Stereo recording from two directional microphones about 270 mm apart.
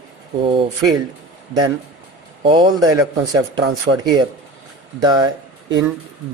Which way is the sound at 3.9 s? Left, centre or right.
Right.